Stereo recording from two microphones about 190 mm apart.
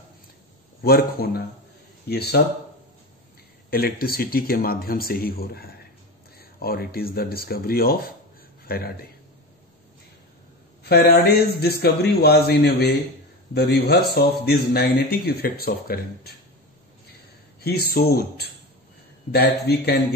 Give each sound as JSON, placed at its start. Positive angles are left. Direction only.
{"t": 0.8, "sound": "a man's voice", "side_deg": 55}
{"t": 3.7, "sound": "a man's voice", "side_deg": 50}
{"t": 10.8, "sound": "speech", "side_deg": 55}
{"t": 17.6, "sound": "speech", "side_deg": 55}